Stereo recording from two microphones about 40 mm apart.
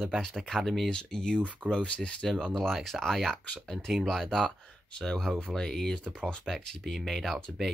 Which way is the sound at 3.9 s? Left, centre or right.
Centre.